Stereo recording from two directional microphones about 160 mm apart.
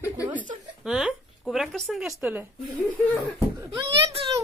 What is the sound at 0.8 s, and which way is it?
Speech, 5° right (ahead or behind).